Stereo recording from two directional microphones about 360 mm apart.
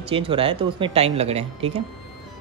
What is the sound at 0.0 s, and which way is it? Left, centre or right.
Speech, centre.